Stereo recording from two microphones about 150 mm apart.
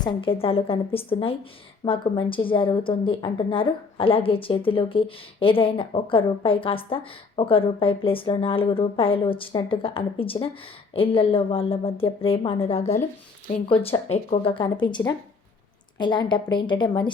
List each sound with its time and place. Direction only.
0.0 s a woman's voice: 35° left (ahead or behind)